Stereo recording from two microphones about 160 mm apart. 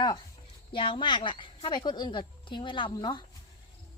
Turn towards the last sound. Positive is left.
turn(degrees=30)  # may be behind; listen again after turning